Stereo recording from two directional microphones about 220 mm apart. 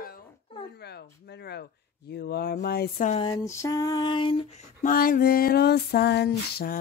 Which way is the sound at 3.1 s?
20° left (ahead or behind).